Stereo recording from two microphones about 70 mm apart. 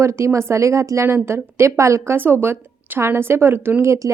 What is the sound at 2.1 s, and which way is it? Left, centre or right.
Speech, right.